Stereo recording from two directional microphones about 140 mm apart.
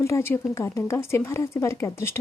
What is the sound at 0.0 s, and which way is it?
Speech, 20° left (ahead or behind).